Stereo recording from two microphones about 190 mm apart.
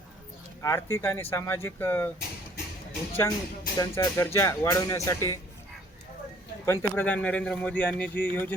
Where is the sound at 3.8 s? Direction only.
15° left (ahead or behind).